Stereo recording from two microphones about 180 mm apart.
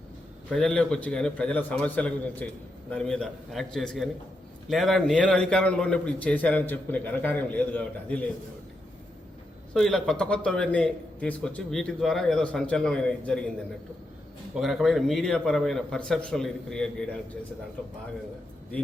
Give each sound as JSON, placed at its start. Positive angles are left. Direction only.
{"t": 0.5, "sound": "a man's voice", "side_deg": 5}
{"t": 9.7, "sound": "a man's voice", "side_deg": 5}
{"t": 14.5, "sound": "a man's voice", "side_deg": 0}